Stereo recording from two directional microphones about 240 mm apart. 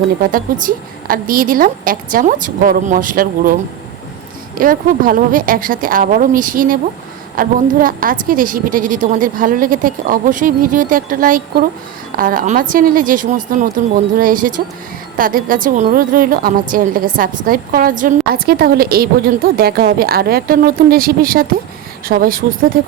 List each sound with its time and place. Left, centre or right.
0.2 s a woman's voice: right